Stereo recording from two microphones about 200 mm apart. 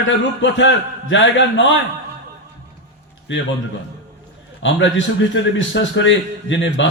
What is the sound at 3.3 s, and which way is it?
Speech, 65° left (ahead or behind).